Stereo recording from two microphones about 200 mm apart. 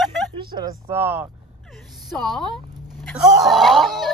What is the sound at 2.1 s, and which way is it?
Speech, centre (ahead or behind).